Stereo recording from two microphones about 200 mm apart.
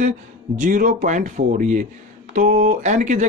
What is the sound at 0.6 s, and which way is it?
Speech, 40° right (ahead or behind).